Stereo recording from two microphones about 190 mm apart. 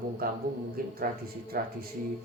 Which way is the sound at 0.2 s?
50° right (ahead or behind).